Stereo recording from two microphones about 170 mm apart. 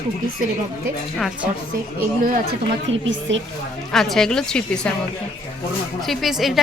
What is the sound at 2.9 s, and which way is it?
Speech, 90° right.